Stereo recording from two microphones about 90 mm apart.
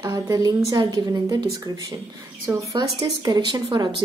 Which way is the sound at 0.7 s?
55° right (ahead or behind).